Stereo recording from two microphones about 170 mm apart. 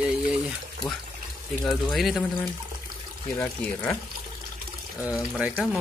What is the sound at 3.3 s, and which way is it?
Speech, 15° left (ahead or behind).